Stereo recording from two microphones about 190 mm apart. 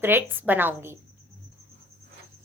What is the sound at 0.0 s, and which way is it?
Speech, 10° right (ahead or behind).